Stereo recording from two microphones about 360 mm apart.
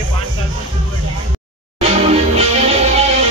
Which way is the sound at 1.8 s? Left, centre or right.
Centre.